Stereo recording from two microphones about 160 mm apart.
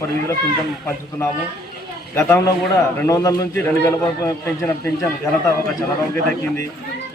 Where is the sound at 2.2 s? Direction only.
15° left (ahead or behind).